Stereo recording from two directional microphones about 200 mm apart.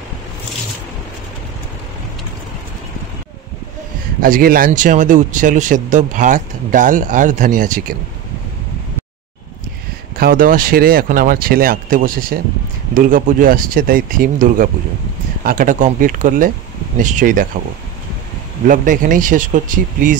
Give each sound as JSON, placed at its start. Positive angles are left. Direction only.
{"t": 4.2, "sound": "speech", "side_deg": -45}
{"t": 10.1, "sound": "speech", "side_deg": -45}
{"t": 18.7, "sound": "speech", "side_deg": -40}